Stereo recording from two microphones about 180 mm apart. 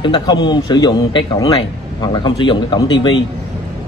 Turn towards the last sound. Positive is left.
turn(degrees=25)  # may be behind; listen again after turning